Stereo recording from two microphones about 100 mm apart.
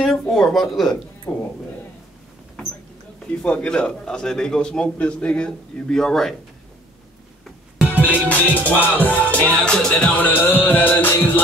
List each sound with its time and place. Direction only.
0.0 s speech: 5° left (ahead or behind)
1.3 s speech: 25° left (ahead or behind)
3.3 s a man's voice: 10° left (ahead or behind)
8.0 s a man's voice: 15° left (ahead or behind)